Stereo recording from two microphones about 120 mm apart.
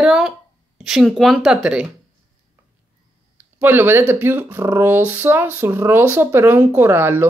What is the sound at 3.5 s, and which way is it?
Speech, 20° right (ahead or behind).